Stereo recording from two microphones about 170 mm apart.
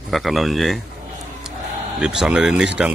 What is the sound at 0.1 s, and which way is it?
Speech, centre (ahead or behind).